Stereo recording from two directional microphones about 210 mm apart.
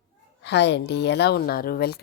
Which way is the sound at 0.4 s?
55° left (ahead or behind).